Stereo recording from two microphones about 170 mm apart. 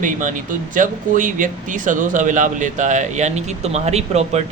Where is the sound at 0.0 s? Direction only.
50° right (ahead or behind).